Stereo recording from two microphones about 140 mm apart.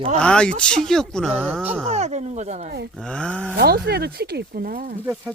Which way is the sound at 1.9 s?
55° right (ahead or behind).